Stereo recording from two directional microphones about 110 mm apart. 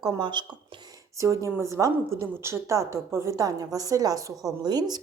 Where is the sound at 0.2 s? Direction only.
45° right (ahead or behind).